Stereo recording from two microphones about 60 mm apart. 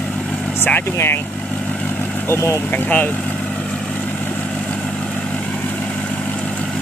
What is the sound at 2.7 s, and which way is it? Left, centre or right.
Speech, left.